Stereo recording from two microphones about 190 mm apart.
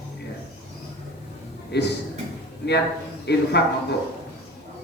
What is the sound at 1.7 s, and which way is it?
Speech, 60° left (ahead or behind).